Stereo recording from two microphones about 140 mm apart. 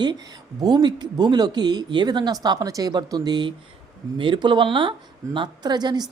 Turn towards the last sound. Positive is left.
turn(degrees=-30)  # may be behind; listen again after turning